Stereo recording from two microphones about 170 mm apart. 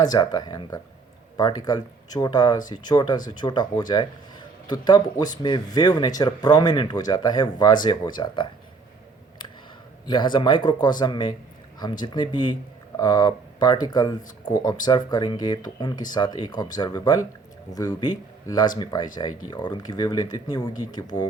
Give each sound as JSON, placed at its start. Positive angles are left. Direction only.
{"t": 0.0, "sound": "a man's voice", "side_deg": 25}
{"t": 10.1, "sound": "a man's voice", "side_deg": 25}